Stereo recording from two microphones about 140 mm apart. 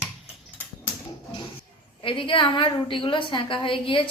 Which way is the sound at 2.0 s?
40° left (ahead or behind).